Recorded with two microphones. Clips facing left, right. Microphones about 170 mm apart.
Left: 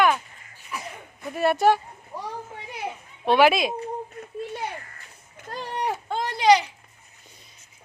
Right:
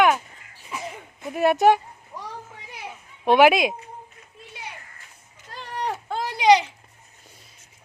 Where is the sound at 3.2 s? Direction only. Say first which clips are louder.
Right 2 dB; 15° right (ahead or behind).